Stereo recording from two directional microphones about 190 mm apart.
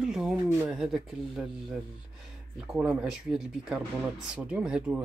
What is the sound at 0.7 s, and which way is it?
Speech, centre (ahead or behind).